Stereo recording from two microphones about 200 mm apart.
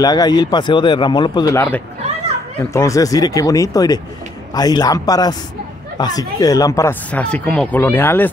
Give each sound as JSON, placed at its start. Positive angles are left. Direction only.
{"t": 0.0, "sound": "a man's voice", "side_deg": 20}